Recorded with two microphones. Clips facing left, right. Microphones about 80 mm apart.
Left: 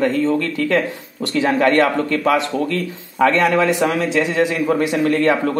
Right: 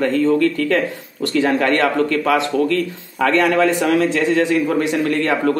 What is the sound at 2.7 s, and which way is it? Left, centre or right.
Speech, left.